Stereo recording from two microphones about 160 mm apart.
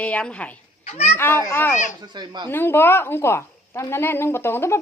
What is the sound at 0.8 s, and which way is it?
Speech, 40° left (ahead or behind).